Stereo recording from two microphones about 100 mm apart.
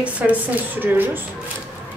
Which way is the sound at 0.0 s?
15° right (ahead or behind).